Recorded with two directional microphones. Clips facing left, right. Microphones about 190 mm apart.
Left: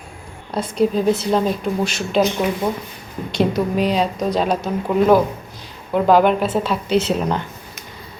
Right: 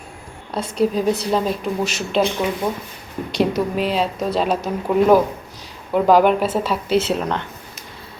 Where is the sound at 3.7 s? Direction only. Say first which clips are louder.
Left 2 dB; 5° right (ahead or behind).